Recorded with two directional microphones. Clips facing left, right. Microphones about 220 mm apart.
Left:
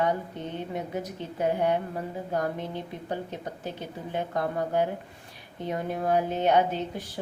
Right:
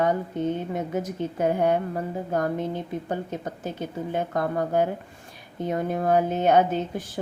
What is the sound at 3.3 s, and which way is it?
Speech, 45° right (ahead or behind).